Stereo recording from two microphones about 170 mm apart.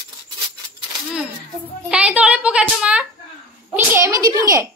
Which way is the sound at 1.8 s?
5° right (ahead or behind).